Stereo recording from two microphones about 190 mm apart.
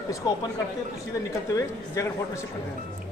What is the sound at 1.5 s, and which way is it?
Speech, 15° left (ahead or behind).